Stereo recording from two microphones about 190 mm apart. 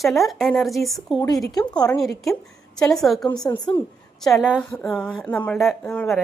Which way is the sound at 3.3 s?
20° left (ahead or behind).